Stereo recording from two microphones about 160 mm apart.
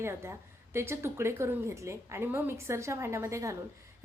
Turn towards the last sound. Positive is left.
turn(degrees=-20)  # may be behind; listen again after turning